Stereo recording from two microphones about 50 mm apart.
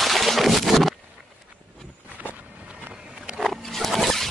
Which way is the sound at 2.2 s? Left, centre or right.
Right.